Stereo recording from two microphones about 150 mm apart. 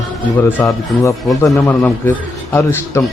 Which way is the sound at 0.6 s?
20° left (ahead or behind).